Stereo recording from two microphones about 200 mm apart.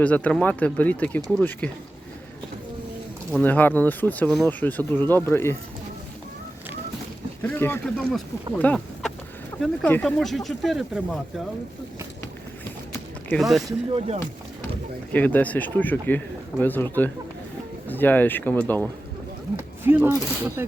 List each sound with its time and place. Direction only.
0.0 s speech: 5° left (ahead or behind)
3.3 s speech: 10° left (ahead or behind)
7.4 s speech: 10° left (ahead or behind)
8.5 s a sound: 5° left (ahead or behind)
9.6 s speech: 5° left (ahead or behind)
13.3 s speech: centre (ahead or behind)
13.7 s speech: 25° right (ahead or behind)
15.1 s speech: 10° left (ahead or behind)
19.5 s speech: 10° right (ahead or behind)